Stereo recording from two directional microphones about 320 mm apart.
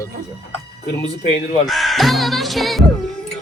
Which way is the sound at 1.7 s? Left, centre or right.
Centre.